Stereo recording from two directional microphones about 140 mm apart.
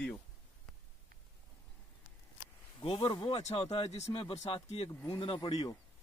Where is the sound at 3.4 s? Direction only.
50° left (ahead or behind); by 5.8 s 30° left (ahead or behind).